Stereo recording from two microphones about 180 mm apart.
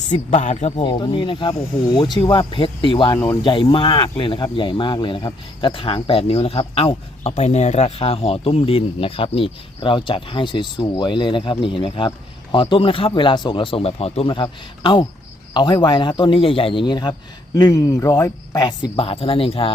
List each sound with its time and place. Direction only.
0.1 s speech: 45° left (ahead or behind)
0.9 s speech: 25° left (ahead or behind)